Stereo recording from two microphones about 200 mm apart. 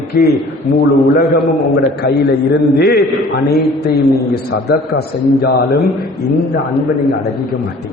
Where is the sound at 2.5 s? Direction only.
55° left (ahead or behind).